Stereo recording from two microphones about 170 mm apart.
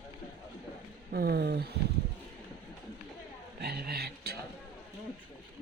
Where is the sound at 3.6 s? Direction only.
70° right (ahead or behind).